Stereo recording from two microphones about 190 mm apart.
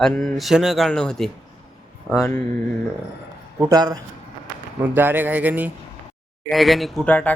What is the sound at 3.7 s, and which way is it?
A man's voice, 20° right (ahead or behind).